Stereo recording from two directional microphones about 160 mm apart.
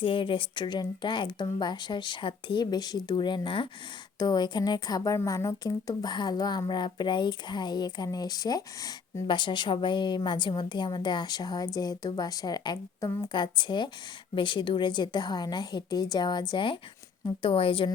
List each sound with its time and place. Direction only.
0.0 s a woman's voice: 35° left (ahead or behind)